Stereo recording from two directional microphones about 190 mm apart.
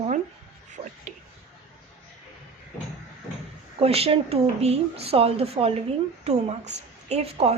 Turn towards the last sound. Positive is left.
turn(degrees=-35)  # may be behind; listen again after turning